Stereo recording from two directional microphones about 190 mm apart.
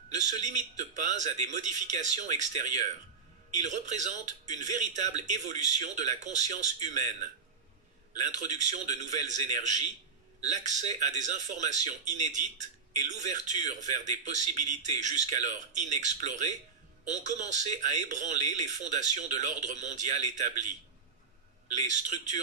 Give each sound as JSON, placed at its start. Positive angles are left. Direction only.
{"t": 0.1, "sound": "speech", "side_deg": -40}
{"t": 21.7, "sound": "speech", "side_deg": -40}